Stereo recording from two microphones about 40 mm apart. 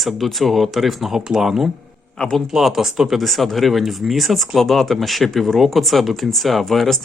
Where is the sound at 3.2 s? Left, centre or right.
Centre.